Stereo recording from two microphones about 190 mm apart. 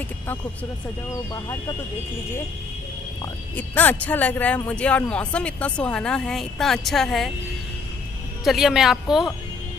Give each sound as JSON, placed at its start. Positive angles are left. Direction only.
{"t": 1.3, "sound": "speech", "side_deg": 20}
{"t": 3.5, "sound": "speech", "side_deg": 10}
{"t": 8.5, "sound": "speech", "side_deg": 0}